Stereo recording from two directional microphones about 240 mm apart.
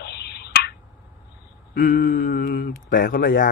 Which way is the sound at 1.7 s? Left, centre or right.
Left.